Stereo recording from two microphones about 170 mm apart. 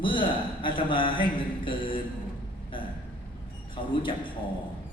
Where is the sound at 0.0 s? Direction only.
30° left (ahead or behind).